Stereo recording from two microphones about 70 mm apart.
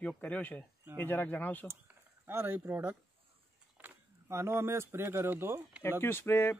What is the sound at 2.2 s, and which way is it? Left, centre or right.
Speech, right.